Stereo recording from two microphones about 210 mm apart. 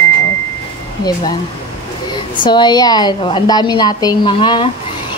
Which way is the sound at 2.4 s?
20° left (ahead or behind).